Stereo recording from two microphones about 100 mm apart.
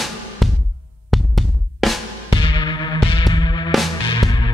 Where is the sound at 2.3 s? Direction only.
55° left (ahead or behind).